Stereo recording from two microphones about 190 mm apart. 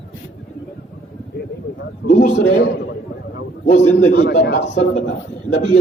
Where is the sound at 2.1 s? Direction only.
40° left (ahead or behind).